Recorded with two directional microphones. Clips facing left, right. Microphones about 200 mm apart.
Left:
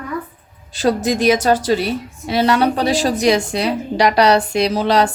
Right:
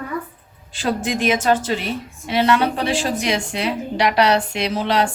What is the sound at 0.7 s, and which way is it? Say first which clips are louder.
A woman's voice: left 5 dB; 40° left (ahead or behind).